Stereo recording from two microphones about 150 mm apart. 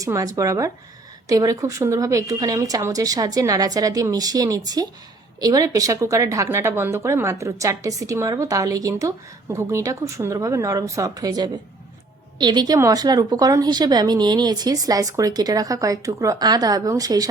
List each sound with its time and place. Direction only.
0.0 s speech: 20° right (ahead or behind)